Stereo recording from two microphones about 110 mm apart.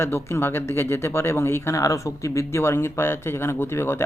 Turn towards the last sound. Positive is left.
turn(degrees=25)  # may be behind; listen again after turning